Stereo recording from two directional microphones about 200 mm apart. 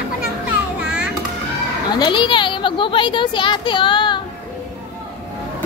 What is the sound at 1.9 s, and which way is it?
Speech, 20° left (ahead or behind).